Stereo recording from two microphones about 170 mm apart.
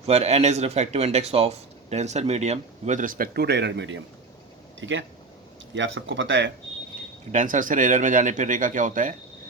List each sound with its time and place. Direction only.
0.0 s speech: 40° right (ahead or behind); by 6.5 s 90° right
7.3 s speech: 50° right (ahead or behind)